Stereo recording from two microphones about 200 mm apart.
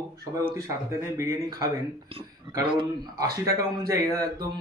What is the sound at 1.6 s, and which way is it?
Speech, 30° right (ahead or behind).